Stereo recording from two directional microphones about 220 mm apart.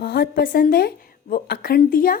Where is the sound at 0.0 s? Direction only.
45° left (ahead or behind).